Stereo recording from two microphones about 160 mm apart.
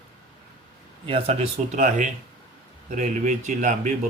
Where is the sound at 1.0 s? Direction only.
35° right (ahead or behind).